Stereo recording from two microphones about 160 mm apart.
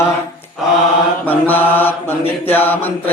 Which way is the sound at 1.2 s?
10° left (ahead or behind).